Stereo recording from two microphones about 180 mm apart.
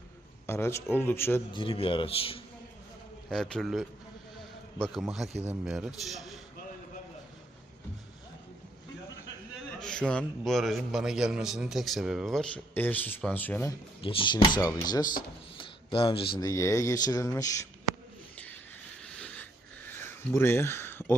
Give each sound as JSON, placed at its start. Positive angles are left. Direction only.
{"t": 0.4, "sound": "speech", "side_deg": 15}
{"t": 1.5, "sound": "a man's voice", "side_deg": 30}
{"t": 3.2, "sound": "a man's voice", "side_deg": 5}
{"t": 9.8, "sound": "a man's voice", "side_deg": 5}
{"t": 14.0, "sound": "speech", "side_deg": 30}
{"t": 18.3, "sound": "a sound", "side_deg": 10}